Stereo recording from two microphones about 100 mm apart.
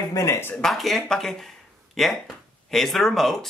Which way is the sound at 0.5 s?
Centre (ahead or behind).